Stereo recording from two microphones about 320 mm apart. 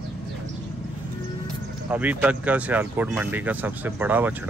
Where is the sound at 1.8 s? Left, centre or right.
Centre.